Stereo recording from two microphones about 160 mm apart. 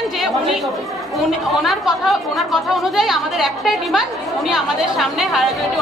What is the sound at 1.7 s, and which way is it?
A woman's voice, centre (ahead or behind).